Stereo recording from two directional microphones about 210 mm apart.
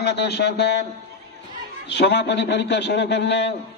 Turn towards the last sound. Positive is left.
turn(degrees=55)  # may be behind; listen again after turning